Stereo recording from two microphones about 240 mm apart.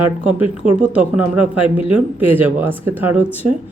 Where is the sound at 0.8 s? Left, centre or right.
Centre.